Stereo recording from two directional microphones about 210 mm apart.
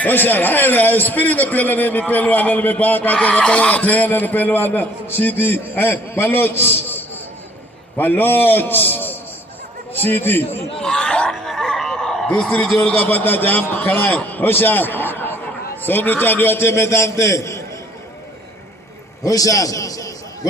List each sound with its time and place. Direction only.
0.0 s a man's voice: 10° left (ahead or behind)
19.2 s a man's voice: 15° left (ahead or behind)